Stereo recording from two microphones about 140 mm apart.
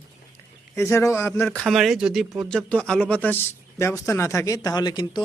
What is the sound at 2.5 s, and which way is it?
A man's voice, 5° left (ahead or behind).